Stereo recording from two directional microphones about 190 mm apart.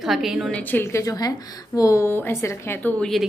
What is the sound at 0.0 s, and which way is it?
A woman's voice, centre (ahead or behind).